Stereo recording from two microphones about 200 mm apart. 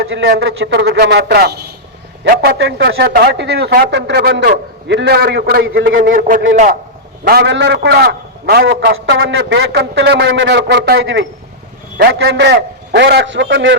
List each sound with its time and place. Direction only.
0.0 s speech: 85° right
0.3 s a man's voice: 60° right (ahead or behind); by 6.7 s 40° right (ahead or behind)
7.3 s a man's voice: 55° right (ahead or behind)
11.9 s a man's voice: 55° right (ahead or behind)